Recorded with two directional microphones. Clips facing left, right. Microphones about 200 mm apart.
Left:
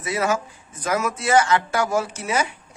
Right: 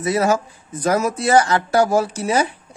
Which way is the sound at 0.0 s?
40° right (ahead or behind).